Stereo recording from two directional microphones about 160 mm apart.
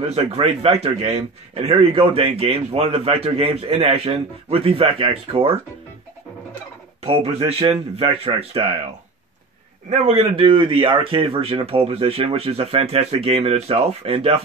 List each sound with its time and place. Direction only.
0.1 s a man's voice: 40° right (ahead or behind)
7.0 s a man's voice: 40° right (ahead or behind)
9.8 s a man's voice: 40° right (ahead or behind)